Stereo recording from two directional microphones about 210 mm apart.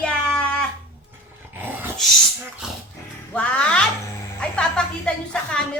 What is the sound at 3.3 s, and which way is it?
A woman's voice, 5° left (ahead or behind).